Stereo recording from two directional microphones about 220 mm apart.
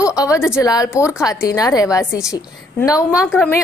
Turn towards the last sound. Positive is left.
turn(degrees=10)  # may be behind; listen again after turning